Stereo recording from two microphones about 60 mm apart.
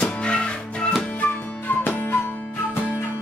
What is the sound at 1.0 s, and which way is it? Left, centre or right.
Music, left.